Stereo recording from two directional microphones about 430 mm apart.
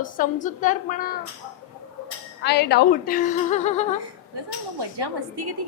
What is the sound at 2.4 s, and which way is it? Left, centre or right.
A woman's voice, left.